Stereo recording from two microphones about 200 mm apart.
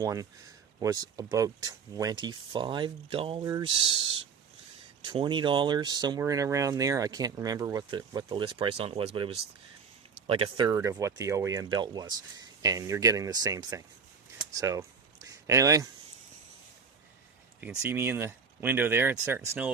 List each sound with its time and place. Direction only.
0.0 s speech: 15° right (ahead or behind)
10.7 s speech: 15° right (ahead or behind)
14.5 s a sound: 15° right (ahead or behind)
17.6 s speech: 10° right (ahead or behind)